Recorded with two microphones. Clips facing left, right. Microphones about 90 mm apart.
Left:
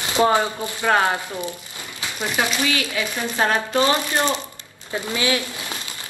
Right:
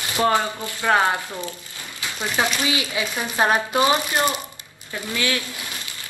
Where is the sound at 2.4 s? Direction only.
20° right (ahead or behind).